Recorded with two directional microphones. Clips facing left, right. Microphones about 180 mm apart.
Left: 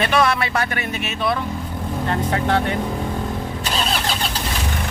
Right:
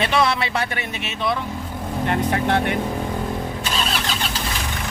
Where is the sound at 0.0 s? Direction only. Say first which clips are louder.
Left 1 dB; 25° right (ahead or behind).